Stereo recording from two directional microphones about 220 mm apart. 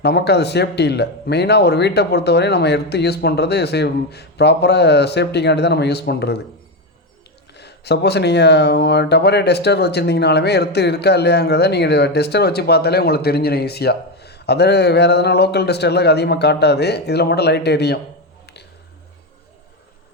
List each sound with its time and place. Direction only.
0.0 s speech: 50° left (ahead or behind)
7.5 s speech: 50° left (ahead or behind)